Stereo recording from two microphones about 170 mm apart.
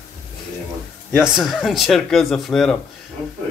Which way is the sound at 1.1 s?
5° right (ahead or behind).